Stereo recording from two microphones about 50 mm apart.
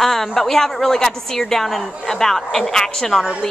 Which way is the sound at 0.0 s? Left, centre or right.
Centre.